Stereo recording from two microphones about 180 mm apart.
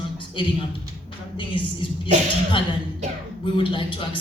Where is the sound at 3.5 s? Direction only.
30° left (ahead or behind).